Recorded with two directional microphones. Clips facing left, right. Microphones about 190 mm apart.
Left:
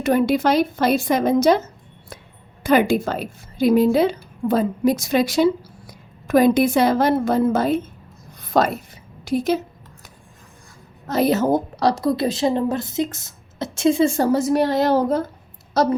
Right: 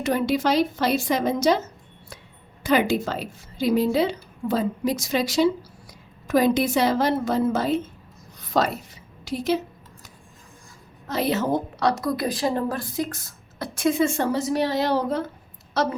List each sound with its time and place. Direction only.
0.0 s a woman's voice: 55° left (ahead or behind)
2.6 s a woman's voice: 50° left (ahead or behind)
11.0 s a woman's voice: 45° left (ahead or behind)